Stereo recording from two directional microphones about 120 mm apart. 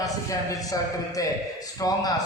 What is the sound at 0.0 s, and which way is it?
A man's voice, 30° left (ahead or behind).